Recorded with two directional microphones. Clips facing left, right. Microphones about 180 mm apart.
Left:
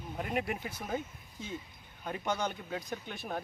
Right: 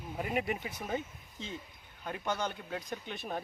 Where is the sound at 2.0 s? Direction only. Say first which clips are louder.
Left 1 dB; 10° left (ahead or behind).